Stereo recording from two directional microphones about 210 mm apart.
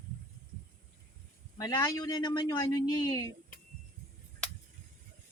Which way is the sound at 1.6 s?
20° left (ahead or behind).